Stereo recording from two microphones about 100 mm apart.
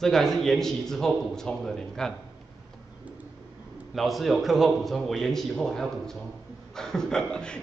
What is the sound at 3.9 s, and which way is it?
A man's voice, centre (ahead or behind).